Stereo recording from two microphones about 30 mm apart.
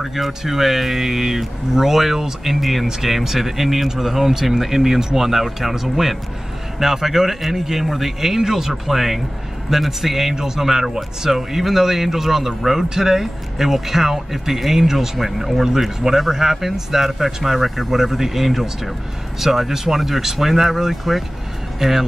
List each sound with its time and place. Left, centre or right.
0.0 s speech: centre
10.3 s speech: centre
10.6 s speech: centre